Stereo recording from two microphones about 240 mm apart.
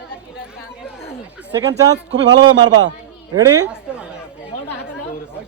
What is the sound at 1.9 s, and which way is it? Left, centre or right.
Speech, right.